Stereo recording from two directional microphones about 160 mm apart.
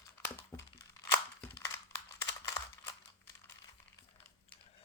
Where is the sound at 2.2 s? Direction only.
20° left (ahead or behind).